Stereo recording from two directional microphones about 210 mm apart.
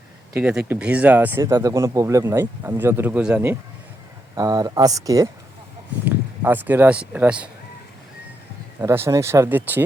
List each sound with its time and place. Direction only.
0.3 s speech: 5° right (ahead or behind)
8.8 s speech: 15° right (ahead or behind)